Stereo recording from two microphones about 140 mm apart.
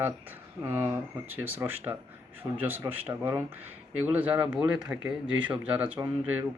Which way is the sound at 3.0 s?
15° right (ahead or behind).